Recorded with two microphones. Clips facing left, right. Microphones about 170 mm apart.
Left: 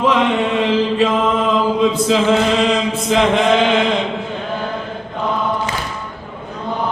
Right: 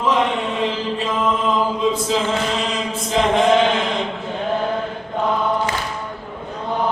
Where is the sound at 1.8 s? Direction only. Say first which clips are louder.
Left 5 dB; 75° left (ahead or behind).